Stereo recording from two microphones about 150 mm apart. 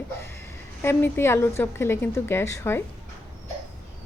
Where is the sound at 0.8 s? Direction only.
15° left (ahead or behind).